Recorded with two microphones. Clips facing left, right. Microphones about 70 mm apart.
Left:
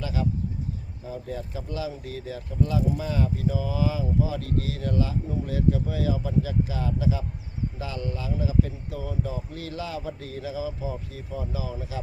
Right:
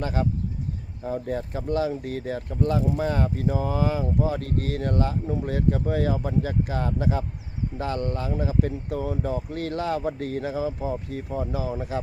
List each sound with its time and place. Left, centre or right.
0.0 s speech: right